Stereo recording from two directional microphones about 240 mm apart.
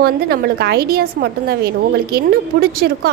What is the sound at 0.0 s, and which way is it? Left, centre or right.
A woman's voice, right.